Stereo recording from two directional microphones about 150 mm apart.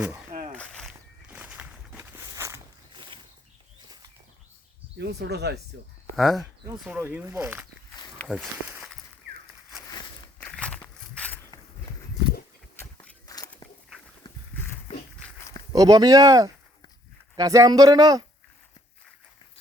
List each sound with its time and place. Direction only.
0.5 s walk: 5° left (ahead or behind)
1.3 s walk: 10° right (ahead or behind)
2.9 s a sound: 30° right (ahead or behind)
4.9 s speech: 90° right
6.1 s speech: centre (ahead or behind)
6.8 s speech: 10° right (ahead or behind)
8.2 s speech: 5° left (ahead or behind)
10.4 s walk: 10° left (ahead or behind)
12.8 s walk: 20° left (ahead or behind)
15.7 s speech: 25° right (ahead or behind)